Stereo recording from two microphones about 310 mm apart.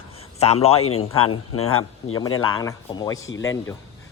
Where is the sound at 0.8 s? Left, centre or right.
Left.